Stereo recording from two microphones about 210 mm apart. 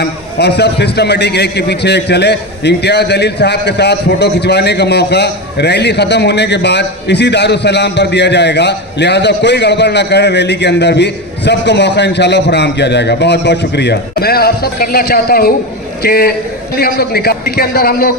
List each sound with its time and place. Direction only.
0.0 s a man's voice: 50° left (ahead or behind)